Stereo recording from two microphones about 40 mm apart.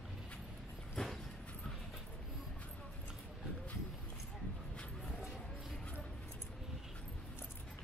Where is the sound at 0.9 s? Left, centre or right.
Centre.